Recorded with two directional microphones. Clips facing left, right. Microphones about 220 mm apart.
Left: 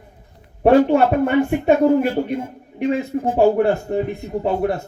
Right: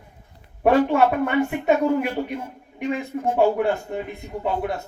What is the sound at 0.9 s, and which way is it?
A man's voice, 30° left (ahead or behind).